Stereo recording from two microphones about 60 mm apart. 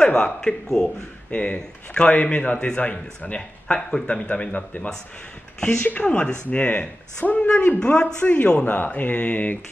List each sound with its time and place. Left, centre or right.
0.0 s a man's voice: centre
1.3 s a man's voice: centre
5.6 s a man's voice: centre